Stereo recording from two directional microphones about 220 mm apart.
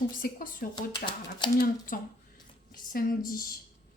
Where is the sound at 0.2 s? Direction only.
40° left (ahead or behind).